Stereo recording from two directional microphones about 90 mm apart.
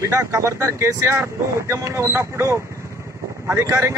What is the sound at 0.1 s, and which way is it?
Speech, 35° right (ahead or behind).